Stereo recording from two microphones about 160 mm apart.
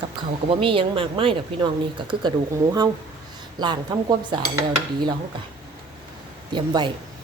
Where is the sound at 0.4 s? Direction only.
35° right (ahead or behind).